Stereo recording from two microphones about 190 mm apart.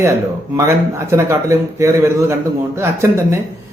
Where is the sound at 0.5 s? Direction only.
15° right (ahead or behind).